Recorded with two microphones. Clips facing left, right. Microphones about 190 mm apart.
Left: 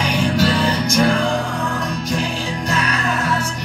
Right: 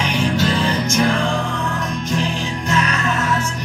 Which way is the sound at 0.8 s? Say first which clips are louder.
Left 2 dB; 35° left (ahead or behind).